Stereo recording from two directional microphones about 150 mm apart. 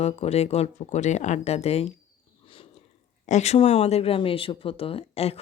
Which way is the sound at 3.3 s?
50° left (ahead or behind).